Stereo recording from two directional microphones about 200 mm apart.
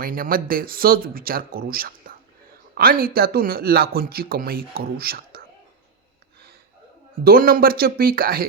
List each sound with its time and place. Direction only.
0.0 s a man's voice: 45° right (ahead or behind)
7.3 s a man's voice: 50° right (ahead or behind)